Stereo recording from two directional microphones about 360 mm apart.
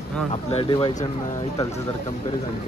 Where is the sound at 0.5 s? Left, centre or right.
Centre.